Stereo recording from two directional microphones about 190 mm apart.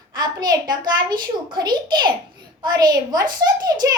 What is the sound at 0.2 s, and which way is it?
A child's voice, 20° right (ahead or behind).